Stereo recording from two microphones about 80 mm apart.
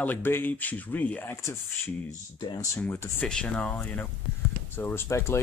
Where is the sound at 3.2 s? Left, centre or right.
Centre.